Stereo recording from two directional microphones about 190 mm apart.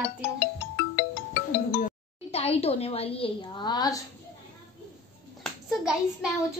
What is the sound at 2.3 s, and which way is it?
A woman's voice, 30° left (ahead or behind).